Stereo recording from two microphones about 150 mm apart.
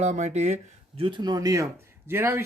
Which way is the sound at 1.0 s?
30° right (ahead or behind).